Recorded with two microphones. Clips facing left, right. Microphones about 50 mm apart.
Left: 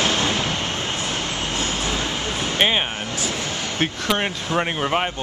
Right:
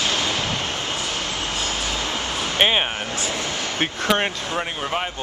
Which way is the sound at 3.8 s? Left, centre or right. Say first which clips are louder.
Right 1 dB; centre.